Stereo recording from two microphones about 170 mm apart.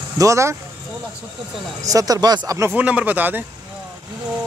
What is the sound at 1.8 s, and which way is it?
Speech, 20° right (ahead or behind).